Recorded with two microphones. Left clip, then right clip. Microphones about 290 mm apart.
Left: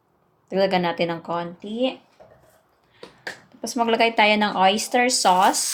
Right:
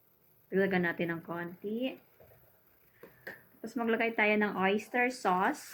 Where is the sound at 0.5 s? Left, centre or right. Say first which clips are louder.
Left 10 dB; left.